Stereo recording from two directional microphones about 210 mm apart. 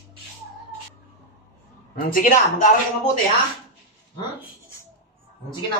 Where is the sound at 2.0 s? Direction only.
40° left (ahead or behind).